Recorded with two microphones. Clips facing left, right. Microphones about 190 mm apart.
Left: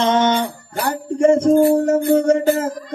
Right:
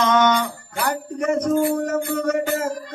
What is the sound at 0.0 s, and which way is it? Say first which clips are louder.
Music: left 2 dB; 30° left (ahead or behind).